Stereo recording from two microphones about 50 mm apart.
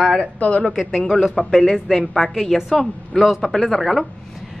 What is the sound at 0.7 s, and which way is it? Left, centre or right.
Speech, centre.